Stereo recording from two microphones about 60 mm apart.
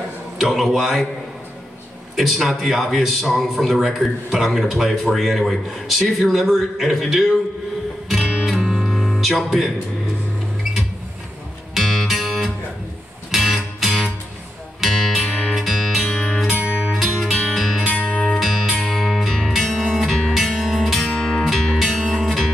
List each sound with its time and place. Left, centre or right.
0.4 s speech: centre
2.1 s speech: centre
8.1 s music: centre
11.7 s music: centre
16.6 s music: right
16.9 s music: centre